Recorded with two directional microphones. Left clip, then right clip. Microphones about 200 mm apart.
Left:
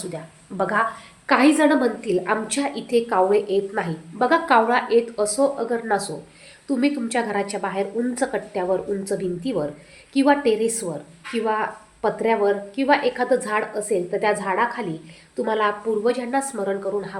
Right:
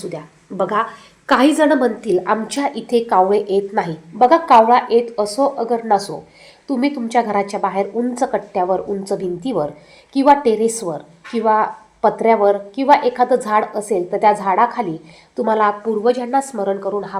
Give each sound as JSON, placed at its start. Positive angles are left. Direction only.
{"t": 0.1, "sound": "a woman's voice", "side_deg": -15}